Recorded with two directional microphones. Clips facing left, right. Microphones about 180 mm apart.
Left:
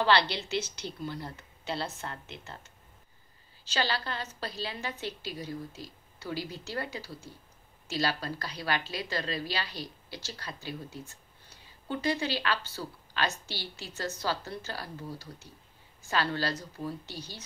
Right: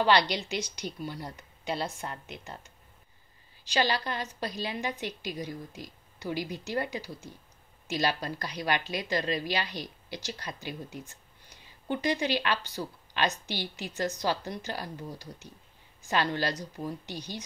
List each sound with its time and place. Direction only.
0.0 s a woman's voice: 15° right (ahead or behind)